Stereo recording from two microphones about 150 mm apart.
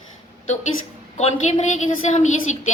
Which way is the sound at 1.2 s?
50° left (ahead or behind).